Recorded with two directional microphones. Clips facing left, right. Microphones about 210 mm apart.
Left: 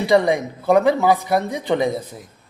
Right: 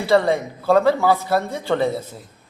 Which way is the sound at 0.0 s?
15° left (ahead or behind).